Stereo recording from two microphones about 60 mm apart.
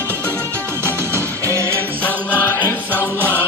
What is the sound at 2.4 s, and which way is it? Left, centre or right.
Music, left.